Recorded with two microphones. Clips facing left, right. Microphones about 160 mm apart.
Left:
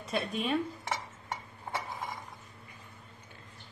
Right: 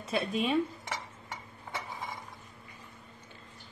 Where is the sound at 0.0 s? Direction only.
Centre (ahead or behind).